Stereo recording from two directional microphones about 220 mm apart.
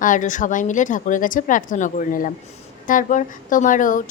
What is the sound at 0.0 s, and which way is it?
A woman's voice, 35° left (ahead or behind).